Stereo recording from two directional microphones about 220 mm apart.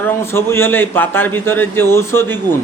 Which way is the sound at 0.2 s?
10° left (ahead or behind).